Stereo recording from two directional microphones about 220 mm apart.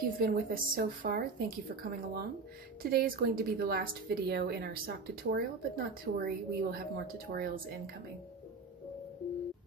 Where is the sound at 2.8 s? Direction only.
40° right (ahead or behind).